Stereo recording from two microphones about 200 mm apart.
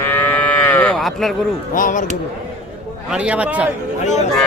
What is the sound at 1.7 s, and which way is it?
Speech, 40° left (ahead or behind).